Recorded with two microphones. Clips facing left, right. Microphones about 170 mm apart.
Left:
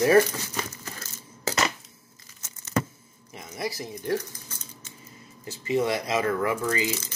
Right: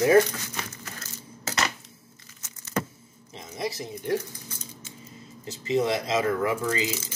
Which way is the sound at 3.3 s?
25° right (ahead or behind).